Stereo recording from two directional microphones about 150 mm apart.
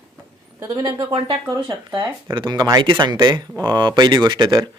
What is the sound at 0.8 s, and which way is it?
A man's voice, 35° right (ahead or behind).